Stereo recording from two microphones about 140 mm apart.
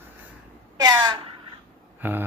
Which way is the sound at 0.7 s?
30° right (ahead or behind).